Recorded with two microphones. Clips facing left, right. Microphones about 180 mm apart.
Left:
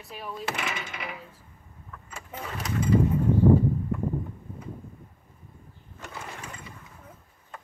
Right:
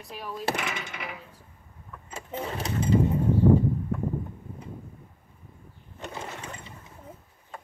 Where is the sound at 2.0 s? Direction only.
25° right (ahead or behind).